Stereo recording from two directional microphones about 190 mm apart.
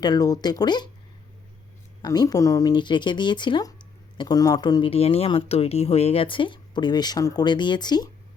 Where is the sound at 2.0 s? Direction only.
20° left (ahead or behind).